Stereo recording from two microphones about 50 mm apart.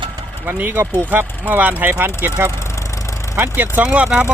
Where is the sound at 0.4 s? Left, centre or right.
Right.